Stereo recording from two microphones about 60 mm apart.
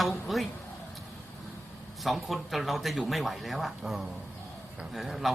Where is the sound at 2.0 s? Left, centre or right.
Centre.